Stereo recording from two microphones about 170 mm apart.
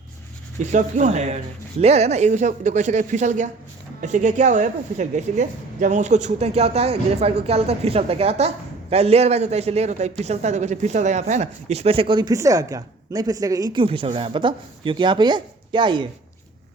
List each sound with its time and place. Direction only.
0.6 s a woman's voice: 45° right (ahead or behind); by 16.0 s 30° right (ahead or behind)